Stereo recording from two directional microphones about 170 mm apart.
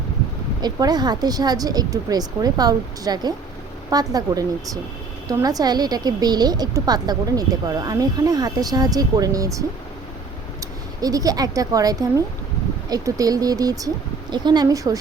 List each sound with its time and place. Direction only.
0.6 s a woman's voice: 25° right (ahead or behind)
11.0 s a woman's voice: 20° right (ahead or behind)